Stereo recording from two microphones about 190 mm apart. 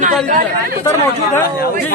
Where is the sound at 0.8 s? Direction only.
10° left (ahead or behind).